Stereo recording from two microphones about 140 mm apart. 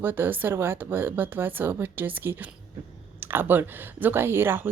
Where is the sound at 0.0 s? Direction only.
15° right (ahead or behind).